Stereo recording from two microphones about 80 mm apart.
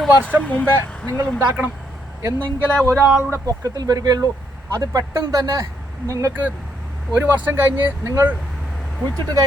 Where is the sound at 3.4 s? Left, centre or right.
Right.